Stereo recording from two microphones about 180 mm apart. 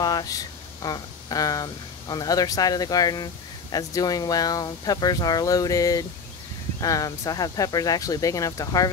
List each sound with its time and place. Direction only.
0.0 s speech: 20° left (ahead or behind)